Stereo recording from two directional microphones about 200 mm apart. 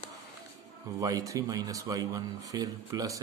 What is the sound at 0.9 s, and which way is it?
Speech, 20° right (ahead or behind).